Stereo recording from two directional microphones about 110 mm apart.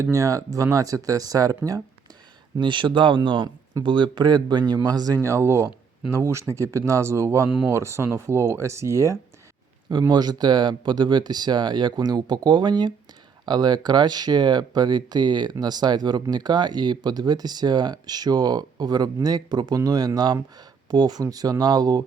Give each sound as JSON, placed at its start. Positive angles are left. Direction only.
{"t": 0.0, "sound": "speech", "side_deg": -30}
{"t": 2.6, "sound": "speech", "side_deg": -45}
{"t": 5.2, "sound": "speech", "side_deg": -25}
{"t": 10.1, "sound": "speech", "side_deg": -40}